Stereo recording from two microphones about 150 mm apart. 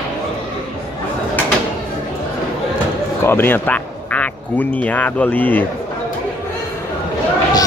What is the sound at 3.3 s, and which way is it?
Speech, 15° left (ahead or behind).